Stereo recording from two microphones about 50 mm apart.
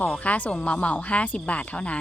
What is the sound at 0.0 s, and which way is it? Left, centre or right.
A woman's voice, left.